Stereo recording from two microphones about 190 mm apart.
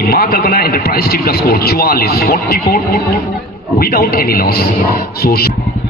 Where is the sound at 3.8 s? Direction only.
50° left (ahead or behind).